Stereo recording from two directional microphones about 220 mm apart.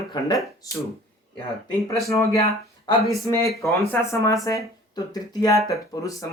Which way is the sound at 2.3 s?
25° left (ahead or behind).